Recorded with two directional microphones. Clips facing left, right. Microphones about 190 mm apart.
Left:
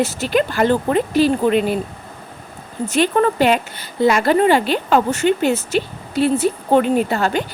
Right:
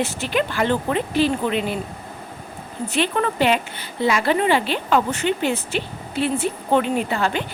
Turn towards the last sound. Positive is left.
turn(degrees=40)  # may be behind; listen again after turning